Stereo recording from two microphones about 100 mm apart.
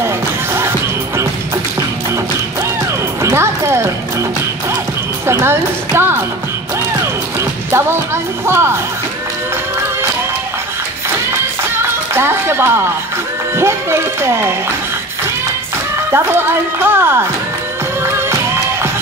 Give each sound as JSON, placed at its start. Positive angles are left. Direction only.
{"t": 0.6, "sound": "music", "side_deg": -25}
{"t": 3.2, "sound": "music", "side_deg": -25}
{"t": 5.2, "sound": "a woman's voice", "side_deg": -25}
{"t": 7.3, "sound": "music", "side_deg": -25}
{"t": 11.7, "sound": "music", "side_deg": -25}
{"t": 13.6, "sound": "speech", "side_deg": -25}
{"t": 16.1, "sound": "speech", "side_deg": -25}
{"t": 18.0, "sound": "music", "side_deg": -25}